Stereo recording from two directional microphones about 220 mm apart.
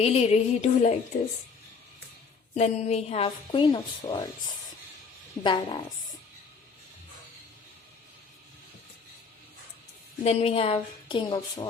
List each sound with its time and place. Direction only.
0.0 s music: 30° left (ahead or behind)
2.6 s a woman's voice: 30° left (ahead or behind)
5.4 s a woman's voice: 20° left (ahead or behind)
10.2 s a woman's voice: 25° left (ahead or behind)